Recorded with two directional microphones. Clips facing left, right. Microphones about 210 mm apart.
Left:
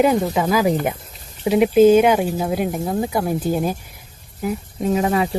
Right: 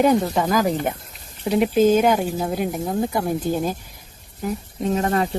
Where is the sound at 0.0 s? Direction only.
5° left (ahead or behind).